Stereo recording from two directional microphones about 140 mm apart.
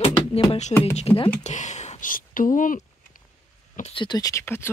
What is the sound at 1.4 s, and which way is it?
Speech, 60° left (ahead or behind).